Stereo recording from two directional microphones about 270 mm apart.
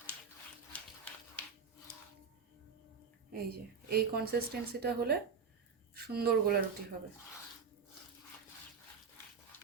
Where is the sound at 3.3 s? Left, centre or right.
Right.